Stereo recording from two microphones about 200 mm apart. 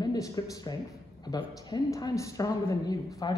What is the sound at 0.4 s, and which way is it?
A woman's voice, 20° left (ahead or behind).